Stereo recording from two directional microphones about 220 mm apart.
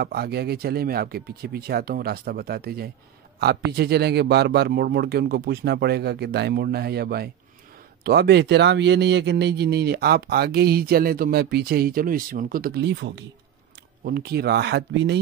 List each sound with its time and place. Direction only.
0.0 s speech: 45° right (ahead or behind)